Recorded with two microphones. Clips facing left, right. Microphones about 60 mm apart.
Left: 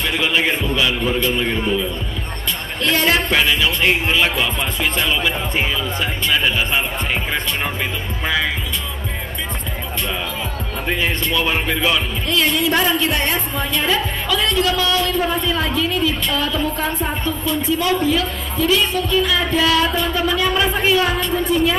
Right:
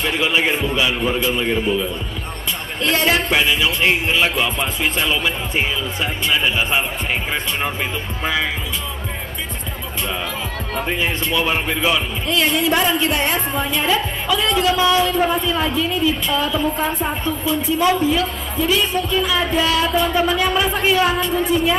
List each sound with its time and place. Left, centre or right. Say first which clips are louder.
0.0 s music: even; centre
2.8 s speech: even; centre
3.1 s music: even; centre
8.2 s music: left 1 dB; centre
10.9 s music: left 2 dB; centre